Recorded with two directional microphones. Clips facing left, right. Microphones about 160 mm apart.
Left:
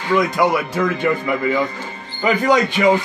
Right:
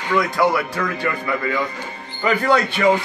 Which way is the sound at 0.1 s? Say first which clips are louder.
Left 2 dB; 20° left (ahead or behind).